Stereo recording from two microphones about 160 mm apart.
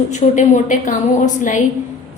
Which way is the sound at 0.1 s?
50° left (ahead or behind).